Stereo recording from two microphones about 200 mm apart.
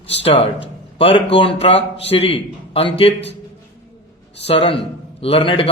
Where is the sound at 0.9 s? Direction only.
30° left (ahead or behind).